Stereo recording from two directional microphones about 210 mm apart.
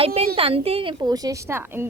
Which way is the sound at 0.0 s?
30° right (ahead or behind).